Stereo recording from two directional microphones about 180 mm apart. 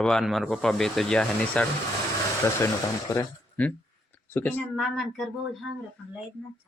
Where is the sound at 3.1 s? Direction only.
15° left (ahead or behind).